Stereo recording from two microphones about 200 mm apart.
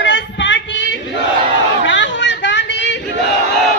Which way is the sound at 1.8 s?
65° left (ahead or behind).